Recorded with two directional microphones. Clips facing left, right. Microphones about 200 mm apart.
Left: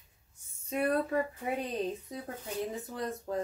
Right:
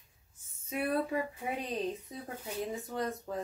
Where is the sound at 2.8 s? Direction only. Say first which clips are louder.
Right 1 dB; centre (ahead or behind).